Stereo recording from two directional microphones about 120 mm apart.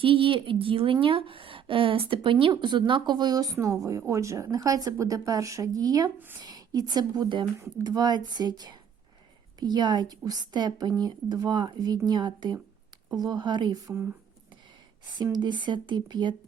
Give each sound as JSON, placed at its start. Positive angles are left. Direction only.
{"t": 0.0, "sound": "a woman's voice", "side_deg": -45}
{"t": 15.2, "sound": "a woman's voice", "side_deg": -40}